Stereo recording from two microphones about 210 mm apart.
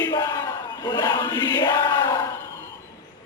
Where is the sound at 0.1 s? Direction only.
20° left (ahead or behind).